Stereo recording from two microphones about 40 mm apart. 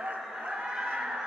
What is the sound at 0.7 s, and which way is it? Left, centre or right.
Fowl, centre.